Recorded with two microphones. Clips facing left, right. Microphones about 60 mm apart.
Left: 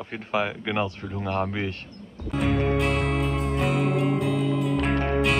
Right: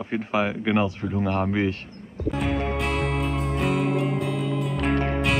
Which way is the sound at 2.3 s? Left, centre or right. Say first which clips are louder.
Left 1 dB; centre.